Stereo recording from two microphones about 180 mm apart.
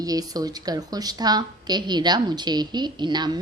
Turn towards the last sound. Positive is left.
turn(degrees=-25)  # may be behind; listen again after turning